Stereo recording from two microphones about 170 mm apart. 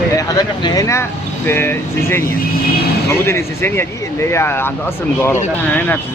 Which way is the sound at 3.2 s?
15° left (ahead or behind).